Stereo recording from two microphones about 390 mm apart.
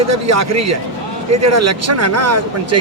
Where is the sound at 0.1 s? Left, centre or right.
Right.